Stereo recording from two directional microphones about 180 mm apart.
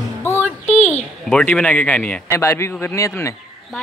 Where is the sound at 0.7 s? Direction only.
40° left (ahead or behind).